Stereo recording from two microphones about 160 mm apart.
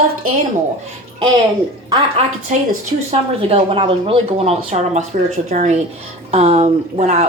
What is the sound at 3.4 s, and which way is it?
A woman's voice, 35° right (ahead or behind).